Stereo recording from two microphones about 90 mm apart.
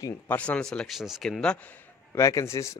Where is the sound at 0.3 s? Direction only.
15° left (ahead or behind).